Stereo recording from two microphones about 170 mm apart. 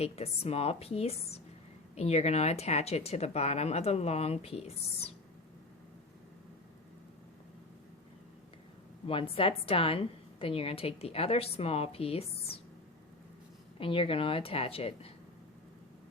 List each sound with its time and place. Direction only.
0.0 s a woman's voice: 35° left (ahead or behind)
9.0 s a woman's voice: 35° left (ahead or behind)
13.7 s a woman's voice: 30° left (ahead or behind)